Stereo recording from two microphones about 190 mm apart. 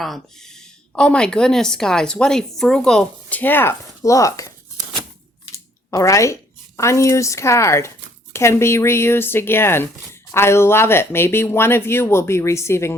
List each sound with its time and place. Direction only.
0.0 s a woman's voice: centre (ahead or behind)
5.5 s speech: 15° left (ahead or behind)